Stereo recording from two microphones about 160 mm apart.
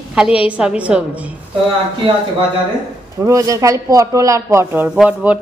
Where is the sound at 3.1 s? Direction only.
20° right (ahead or behind).